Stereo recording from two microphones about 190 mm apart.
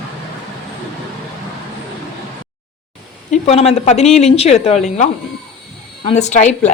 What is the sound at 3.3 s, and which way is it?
A woman's voice, 35° left (ahead or behind).